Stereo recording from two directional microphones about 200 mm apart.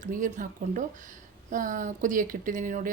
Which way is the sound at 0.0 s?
40° right (ahead or behind).